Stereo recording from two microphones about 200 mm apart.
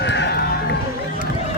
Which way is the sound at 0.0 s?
60° left (ahead or behind).